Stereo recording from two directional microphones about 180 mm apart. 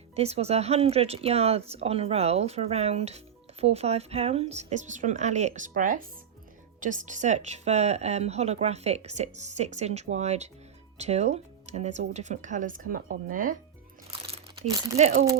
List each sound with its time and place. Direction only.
0.2 s speech: 35° right (ahead or behind)
14.7 s speech: 15° right (ahead or behind)